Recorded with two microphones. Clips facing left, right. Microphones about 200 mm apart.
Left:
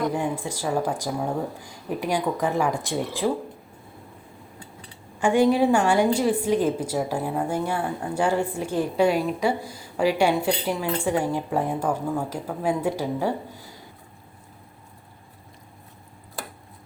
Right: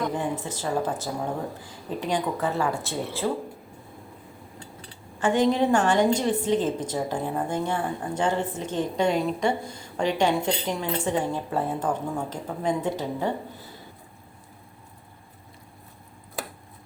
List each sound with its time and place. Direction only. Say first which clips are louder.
0.1 s a woman's voice: left 2 dB; 10° left (ahead or behind)
4.6 s a sound: right 1 dB; 30° right (ahead or behind)
5.2 s a woman's voice: left 3 dB; 10° left (ahead or behind)